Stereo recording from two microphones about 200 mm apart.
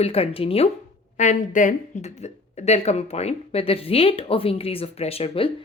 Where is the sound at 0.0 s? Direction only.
30° left (ahead or behind).